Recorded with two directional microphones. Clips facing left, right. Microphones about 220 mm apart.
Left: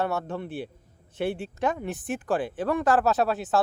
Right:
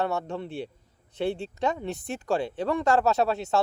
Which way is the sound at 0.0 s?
20° right (ahead or behind).